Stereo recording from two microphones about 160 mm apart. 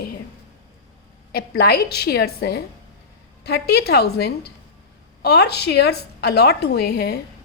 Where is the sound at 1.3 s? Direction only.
75° left (ahead or behind); by 7.2 s 90° left.